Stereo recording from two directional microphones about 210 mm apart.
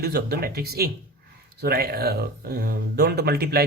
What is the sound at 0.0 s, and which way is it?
Speech, 50° right (ahead or behind).